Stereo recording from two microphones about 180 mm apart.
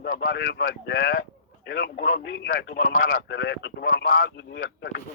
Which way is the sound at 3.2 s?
70° left (ahead or behind).